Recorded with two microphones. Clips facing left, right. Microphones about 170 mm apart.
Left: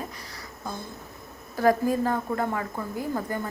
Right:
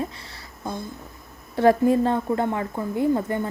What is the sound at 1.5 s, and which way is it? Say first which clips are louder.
Speech: right 5 dB; 25° right (ahead or behind).